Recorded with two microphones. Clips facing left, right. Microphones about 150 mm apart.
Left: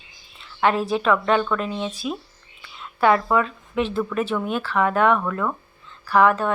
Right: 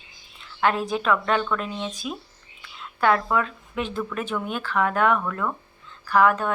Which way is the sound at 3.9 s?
Centre (ahead or behind).